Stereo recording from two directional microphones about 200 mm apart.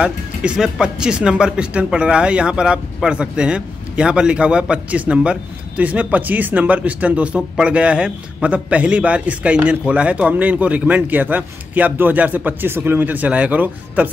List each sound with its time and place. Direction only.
0.0 s speech: 5° right (ahead or behind)